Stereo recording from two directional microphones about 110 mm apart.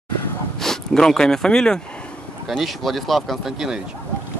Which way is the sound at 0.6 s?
5° left (ahead or behind).